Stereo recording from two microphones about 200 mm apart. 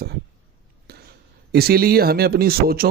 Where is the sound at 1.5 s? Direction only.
50° right (ahead or behind).